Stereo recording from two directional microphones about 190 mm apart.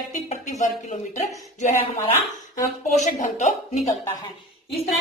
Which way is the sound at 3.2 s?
40° left (ahead or behind).